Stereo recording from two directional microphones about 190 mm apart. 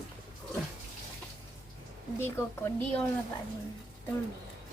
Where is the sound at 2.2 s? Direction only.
10° left (ahead or behind).